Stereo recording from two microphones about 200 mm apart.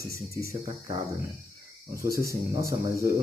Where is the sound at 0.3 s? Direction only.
15° right (ahead or behind).